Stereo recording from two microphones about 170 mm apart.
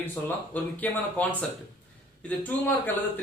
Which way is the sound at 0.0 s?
10° left (ahead or behind).